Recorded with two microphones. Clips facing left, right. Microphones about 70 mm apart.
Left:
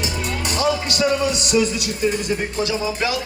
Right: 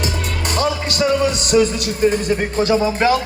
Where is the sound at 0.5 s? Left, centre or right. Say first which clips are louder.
Right 1 dB; right.